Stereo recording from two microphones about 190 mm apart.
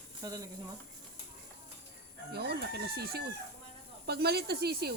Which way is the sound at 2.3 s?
55° right (ahead or behind).